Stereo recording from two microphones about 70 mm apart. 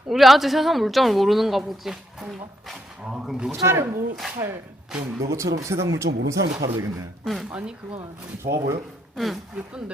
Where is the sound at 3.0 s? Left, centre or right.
Centre.